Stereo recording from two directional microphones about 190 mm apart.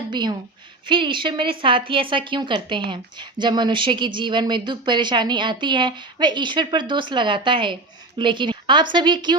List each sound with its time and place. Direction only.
0.1 s a woman's voice: 25° right (ahead or behind)